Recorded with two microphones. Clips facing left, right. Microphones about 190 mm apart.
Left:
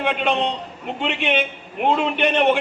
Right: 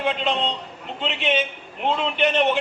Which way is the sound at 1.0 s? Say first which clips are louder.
Left 1 dB; 60° left (ahead or behind).